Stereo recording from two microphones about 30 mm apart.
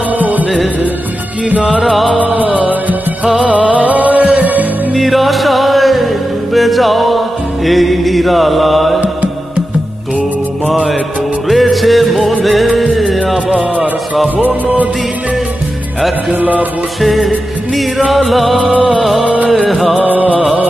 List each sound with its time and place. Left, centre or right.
0.2 s music: right
1.8 s music: centre
3.7 s music: right
4.9 s music: centre
11.4 s music: centre
14.3 s music: right
16.3 s music: right
17.0 s music: centre
19.2 s music: right
19.5 s music: centre